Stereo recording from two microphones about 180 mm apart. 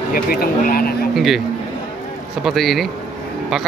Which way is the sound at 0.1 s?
55° left (ahead or behind).